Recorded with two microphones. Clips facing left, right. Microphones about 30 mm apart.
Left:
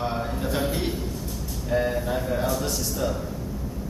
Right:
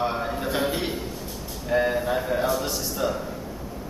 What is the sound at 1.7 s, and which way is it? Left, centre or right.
Speech, centre.